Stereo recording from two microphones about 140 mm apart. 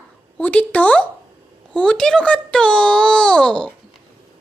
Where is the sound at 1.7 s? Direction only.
5° left (ahead or behind).